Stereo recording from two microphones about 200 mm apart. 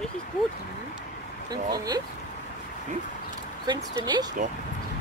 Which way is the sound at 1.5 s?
20° right (ahead or behind).